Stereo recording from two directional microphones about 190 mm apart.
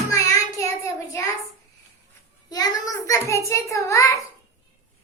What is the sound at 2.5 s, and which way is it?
A child's voice, 20° left (ahead or behind).